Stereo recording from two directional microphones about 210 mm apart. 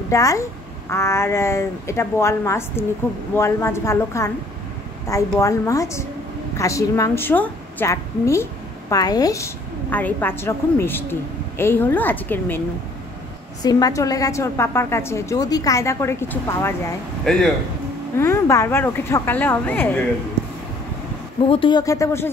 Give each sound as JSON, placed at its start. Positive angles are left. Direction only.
{"t": 0.1, "sound": "a woman's voice", "side_deg": 15}
{"t": 18.2, "sound": "a woman's voice", "side_deg": 15}
{"t": 21.5, "sound": "a woman's voice", "side_deg": 25}